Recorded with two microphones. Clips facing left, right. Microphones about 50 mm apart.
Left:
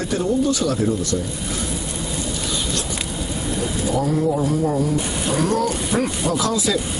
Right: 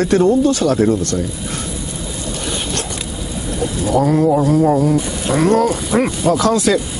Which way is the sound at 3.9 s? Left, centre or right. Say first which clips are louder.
Right 8 dB; right.